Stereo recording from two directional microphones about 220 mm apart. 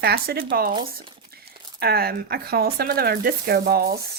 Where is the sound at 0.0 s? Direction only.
45° right (ahead or behind).